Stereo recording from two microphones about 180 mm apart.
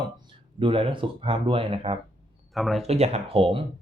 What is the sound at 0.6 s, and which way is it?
Speech, 30° right (ahead or behind).